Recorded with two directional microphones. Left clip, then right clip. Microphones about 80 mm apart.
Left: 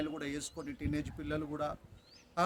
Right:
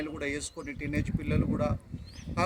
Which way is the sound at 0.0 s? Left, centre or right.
Left.